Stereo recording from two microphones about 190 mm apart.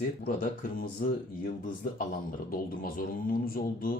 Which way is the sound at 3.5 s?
50° left (ahead or behind).